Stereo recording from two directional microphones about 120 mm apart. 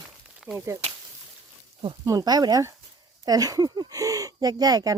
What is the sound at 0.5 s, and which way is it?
Speech, 25° right (ahead or behind).